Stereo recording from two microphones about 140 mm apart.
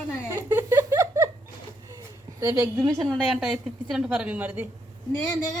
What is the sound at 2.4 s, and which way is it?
Speech, 25° right (ahead or behind).